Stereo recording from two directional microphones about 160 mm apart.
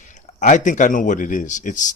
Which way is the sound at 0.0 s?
50° left (ahead or behind).